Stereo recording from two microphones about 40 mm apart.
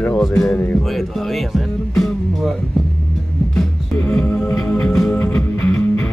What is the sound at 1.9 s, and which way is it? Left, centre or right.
Music, centre.